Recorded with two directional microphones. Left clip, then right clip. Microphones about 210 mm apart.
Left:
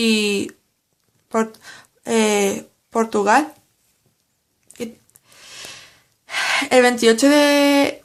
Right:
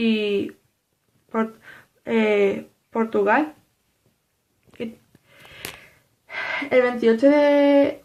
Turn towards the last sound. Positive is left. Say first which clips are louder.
# left 1 dB
turn(degrees=35)  # may be behind; listen again after turning